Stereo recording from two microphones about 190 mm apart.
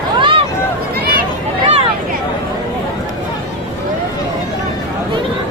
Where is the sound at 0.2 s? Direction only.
25° right (ahead or behind).